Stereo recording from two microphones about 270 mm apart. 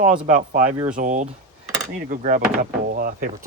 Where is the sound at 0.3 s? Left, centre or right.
Right.